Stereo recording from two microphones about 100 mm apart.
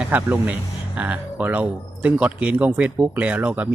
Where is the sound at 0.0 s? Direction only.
15° right (ahead or behind).